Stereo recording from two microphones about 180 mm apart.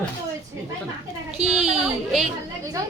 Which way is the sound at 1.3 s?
35° right (ahead or behind).